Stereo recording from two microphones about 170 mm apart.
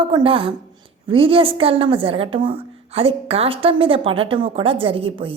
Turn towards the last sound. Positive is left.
turn(degrees=-35)  # may be behind; listen again after turning